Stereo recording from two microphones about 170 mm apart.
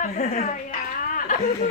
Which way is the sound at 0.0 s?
40° left (ahead or behind).